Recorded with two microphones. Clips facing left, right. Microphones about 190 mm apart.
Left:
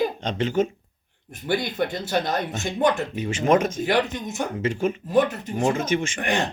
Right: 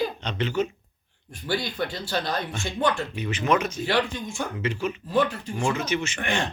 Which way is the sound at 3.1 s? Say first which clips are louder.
Left 4 dB; 45° left (ahead or behind).